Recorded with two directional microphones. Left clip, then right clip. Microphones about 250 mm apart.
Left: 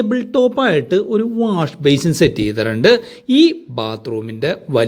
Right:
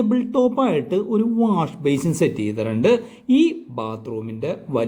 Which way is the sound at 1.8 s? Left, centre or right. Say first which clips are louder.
Left 9 dB; centre.